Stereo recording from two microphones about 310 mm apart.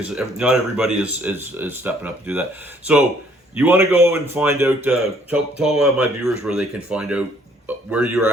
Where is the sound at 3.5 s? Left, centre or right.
Centre.